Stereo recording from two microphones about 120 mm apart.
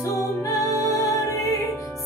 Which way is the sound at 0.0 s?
30° left (ahead or behind).